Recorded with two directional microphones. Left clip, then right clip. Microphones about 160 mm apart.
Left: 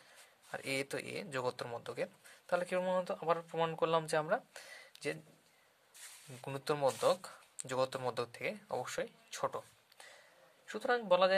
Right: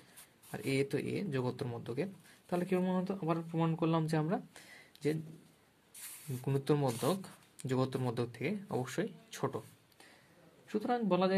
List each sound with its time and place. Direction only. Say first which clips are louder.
0.5 s speech: right 3 dB; 35° left (ahead or behind)
6.4 s speech: right 1 dB; 25° left (ahead or behind)
10.7 s speech: left 2 dB; 45° left (ahead or behind)